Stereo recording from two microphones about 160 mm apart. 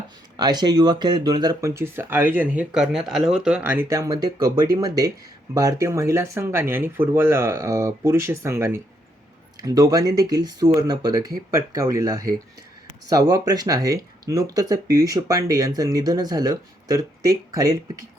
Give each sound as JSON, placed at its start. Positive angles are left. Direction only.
{"t": 0.3, "sound": "speech", "side_deg": -25}